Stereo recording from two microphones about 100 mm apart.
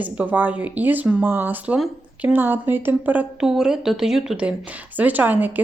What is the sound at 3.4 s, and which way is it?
Speech, 5° right (ahead or behind).